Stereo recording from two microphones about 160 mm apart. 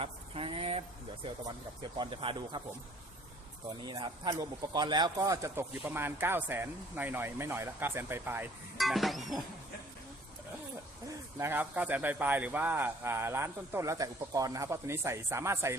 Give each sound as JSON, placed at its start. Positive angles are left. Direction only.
{"t": 0.0, "sound": "speech", "side_deg": -35}
{"t": 3.8, "sound": "speech", "side_deg": -25}
{"t": 8.8, "sound": "a sound", "side_deg": 0}
{"t": 11.3, "sound": "speech", "side_deg": -15}